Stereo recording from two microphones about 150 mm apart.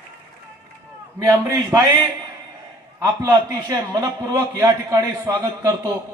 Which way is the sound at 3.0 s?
25° right (ahead or behind).